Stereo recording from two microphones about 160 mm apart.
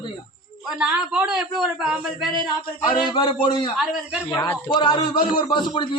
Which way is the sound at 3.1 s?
30° left (ahead or behind).